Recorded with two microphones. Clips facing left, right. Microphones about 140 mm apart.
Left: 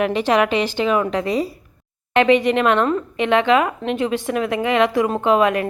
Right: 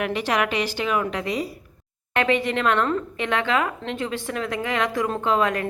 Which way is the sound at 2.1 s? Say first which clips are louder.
Left 7 dB; 20° left (ahead or behind).